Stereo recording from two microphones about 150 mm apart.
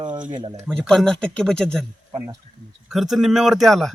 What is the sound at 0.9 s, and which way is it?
Speech, 5° left (ahead or behind).